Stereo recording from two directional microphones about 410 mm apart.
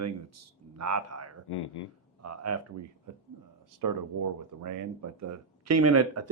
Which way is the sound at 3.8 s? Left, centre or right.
Right.